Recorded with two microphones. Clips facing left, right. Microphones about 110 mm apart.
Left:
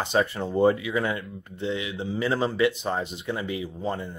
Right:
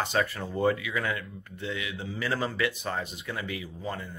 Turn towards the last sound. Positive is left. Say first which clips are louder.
# left 6 dB
turn(degrees=25)  # may be behind; listen again after turning